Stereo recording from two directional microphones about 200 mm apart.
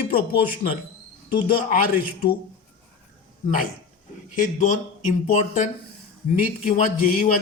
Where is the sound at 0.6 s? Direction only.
40° left (ahead or behind).